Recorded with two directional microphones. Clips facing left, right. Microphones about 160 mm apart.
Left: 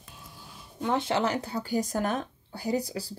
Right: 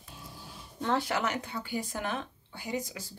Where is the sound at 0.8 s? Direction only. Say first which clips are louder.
Left 2 dB; 15° left (ahead or behind).